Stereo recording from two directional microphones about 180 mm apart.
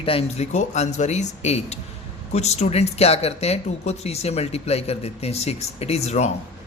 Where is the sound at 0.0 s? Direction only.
30° left (ahead or behind).